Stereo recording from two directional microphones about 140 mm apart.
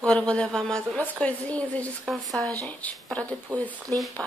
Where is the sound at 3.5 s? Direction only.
25° right (ahead or behind).